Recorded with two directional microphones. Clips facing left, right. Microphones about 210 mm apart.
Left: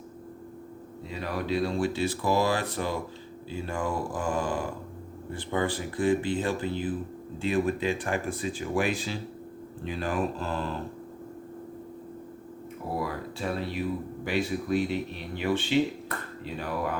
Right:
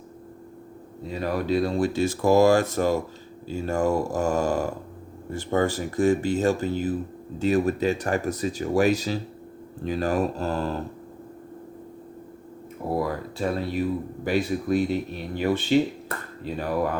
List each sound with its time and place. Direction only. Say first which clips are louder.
1.1 s speech: right 5 dB; 45° right (ahead or behind)
13.0 s speech: right 5 dB; 45° right (ahead or behind)